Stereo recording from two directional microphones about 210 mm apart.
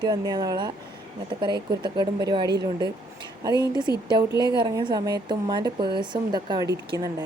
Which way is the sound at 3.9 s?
20° left (ahead or behind).